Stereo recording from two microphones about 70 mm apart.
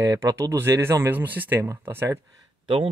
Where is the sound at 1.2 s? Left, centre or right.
Right.